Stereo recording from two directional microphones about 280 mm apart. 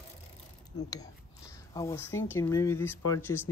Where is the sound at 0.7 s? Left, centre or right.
Centre.